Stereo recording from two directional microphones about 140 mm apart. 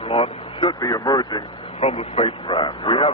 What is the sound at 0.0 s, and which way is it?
Vehicle, 40° left (ahead or behind).